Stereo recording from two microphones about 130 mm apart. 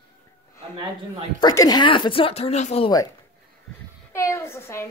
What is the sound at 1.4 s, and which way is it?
Speech, 30° left (ahead or behind).